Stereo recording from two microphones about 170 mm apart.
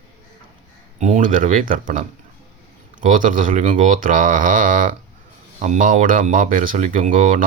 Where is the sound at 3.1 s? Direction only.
50° right (ahead or behind).